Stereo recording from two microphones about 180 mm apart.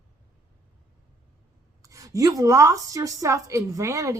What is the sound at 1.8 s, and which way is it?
A woman's voice, 20° right (ahead or behind).